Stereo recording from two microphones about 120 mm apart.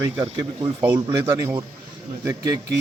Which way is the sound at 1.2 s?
20° right (ahead or behind).